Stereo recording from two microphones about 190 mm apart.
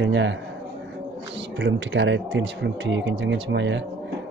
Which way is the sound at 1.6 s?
70° right (ahead or behind).